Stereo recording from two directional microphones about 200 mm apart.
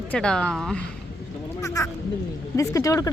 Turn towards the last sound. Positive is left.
turn(degrees=15)  # may be behind; listen again after turning